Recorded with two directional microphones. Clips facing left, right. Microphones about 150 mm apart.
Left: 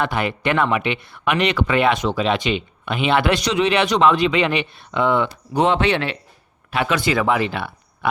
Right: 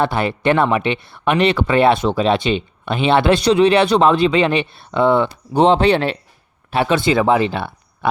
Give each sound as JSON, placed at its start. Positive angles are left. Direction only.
{"t": 0.0, "sound": "speech", "side_deg": -30}